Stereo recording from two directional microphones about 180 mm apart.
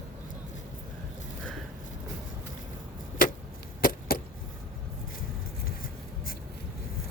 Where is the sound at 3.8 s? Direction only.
50° left (ahead or behind).